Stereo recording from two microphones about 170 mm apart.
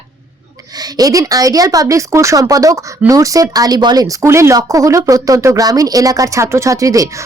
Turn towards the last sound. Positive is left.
turn(degrees=-20)  # may be behind; listen again after turning